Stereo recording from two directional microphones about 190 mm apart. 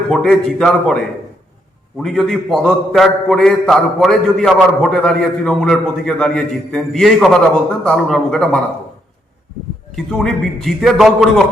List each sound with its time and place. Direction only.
0.1 s a man's voice: centre (ahead or behind)
2.0 s a man's voice: centre (ahead or behind)
9.9 s a man's voice: centre (ahead or behind)